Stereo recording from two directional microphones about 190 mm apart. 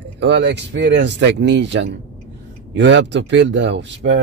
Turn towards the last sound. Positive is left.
turn(degrees=-65)  # may be behind; listen again after turning